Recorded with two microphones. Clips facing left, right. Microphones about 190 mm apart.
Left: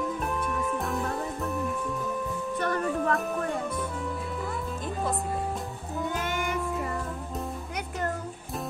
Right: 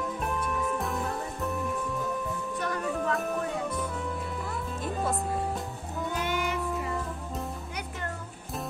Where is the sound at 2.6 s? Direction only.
55° left (ahead or behind).